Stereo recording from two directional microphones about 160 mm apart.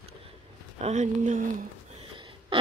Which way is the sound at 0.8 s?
50° right (ahead or behind).